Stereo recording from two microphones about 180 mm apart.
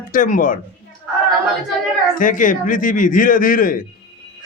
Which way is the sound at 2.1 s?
45° left (ahead or behind).